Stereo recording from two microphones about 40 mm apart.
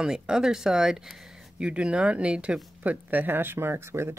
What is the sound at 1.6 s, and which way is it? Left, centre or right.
Speech, right.